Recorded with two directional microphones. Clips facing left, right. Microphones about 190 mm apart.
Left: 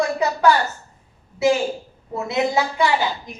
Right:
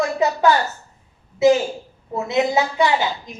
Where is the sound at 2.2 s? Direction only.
20° right (ahead or behind).